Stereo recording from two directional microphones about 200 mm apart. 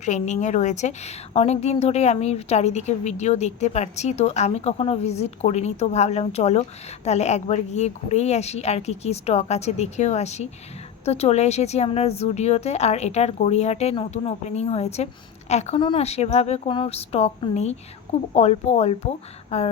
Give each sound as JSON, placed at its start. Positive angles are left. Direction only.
{"t": 0.0, "sound": "a woman's voice", "side_deg": 35}